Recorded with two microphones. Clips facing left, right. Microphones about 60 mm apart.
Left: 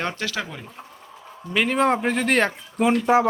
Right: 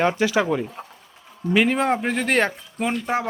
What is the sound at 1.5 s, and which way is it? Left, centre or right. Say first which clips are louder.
Speech: right 1 dB; centre.